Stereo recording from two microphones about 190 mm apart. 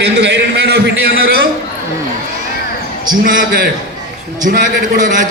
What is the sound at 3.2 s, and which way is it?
A man's voice, 45° right (ahead or behind).